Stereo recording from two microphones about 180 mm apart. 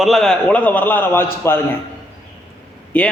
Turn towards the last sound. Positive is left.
turn(degrees=10)  # may be behind; listen again after turning